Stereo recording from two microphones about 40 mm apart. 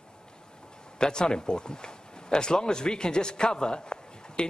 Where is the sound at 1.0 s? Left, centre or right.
Centre.